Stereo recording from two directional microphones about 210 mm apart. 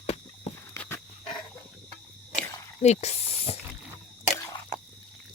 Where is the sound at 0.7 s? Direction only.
10° left (ahead or behind).